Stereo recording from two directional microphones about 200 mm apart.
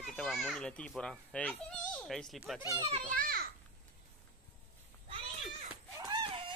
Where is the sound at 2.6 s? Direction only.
15° right (ahead or behind).